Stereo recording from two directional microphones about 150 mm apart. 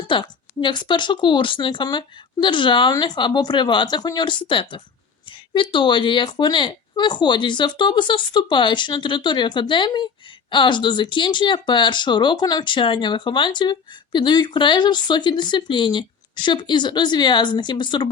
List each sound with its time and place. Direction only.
0.1 s speech: 35° left (ahead or behind)